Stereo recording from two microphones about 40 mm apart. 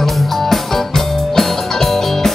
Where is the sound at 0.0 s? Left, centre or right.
Centre.